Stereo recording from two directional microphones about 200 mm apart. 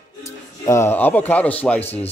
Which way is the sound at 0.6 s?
15° left (ahead or behind).